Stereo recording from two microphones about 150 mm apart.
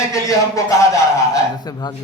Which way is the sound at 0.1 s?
20° left (ahead or behind).